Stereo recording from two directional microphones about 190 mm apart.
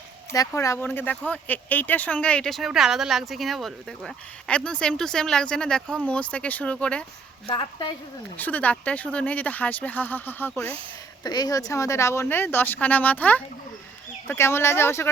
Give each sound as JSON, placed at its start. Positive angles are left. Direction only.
{"t": 0.3, "sound": "speech", "side_deg": 15}
{"t": 7.4, "sound": "a woman's voice", "side_deg": 25}
{"t": 8.4, "sound": "speech", "side_deg": 10}
{"t": 11.2, "sound": "speech", "side_deg": 20}